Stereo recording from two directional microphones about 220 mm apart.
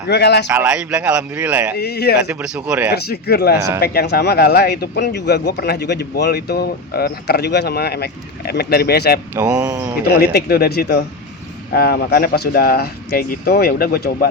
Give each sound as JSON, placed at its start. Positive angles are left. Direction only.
{"t": 0.1, "sound": "speech", "side_deg": 50}
{"t": 0.4, "sound": "speech", "side_deg": -5}
{"t": 1.7, "sound": "speech", "side_deg": 45}
{"t": 2.2, "sound": "speech", "side_deg": -5}
{"t": 2.9, "sound": "speech", "side_deg": 45}
{"t": 9.3, "sound": "speech", "side_deg": -10}
{"t": 10.2, "sound": "speech", "side_deg": 45}